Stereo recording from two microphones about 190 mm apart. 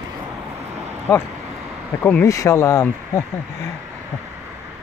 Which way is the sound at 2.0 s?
15° left (ahead or behind).